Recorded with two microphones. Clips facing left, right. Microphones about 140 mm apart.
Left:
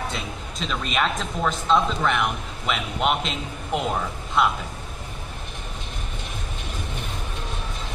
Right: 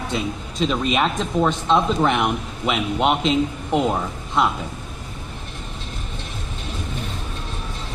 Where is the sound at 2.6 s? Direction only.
5° right (ahead or behind).